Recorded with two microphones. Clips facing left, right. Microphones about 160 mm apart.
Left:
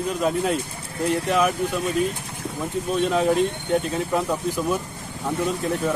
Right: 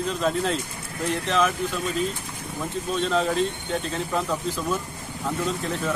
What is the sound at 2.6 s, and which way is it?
Speech, 15° left (ahead or behind).